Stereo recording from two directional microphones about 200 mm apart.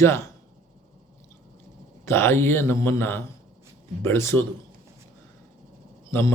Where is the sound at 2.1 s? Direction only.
10° left (ahead or behind).